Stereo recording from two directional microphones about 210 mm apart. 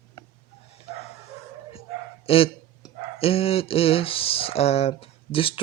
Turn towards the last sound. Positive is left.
turn(degrees=25)  # may be behind; listen again after turning